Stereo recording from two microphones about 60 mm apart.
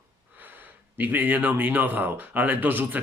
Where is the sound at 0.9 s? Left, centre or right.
Right.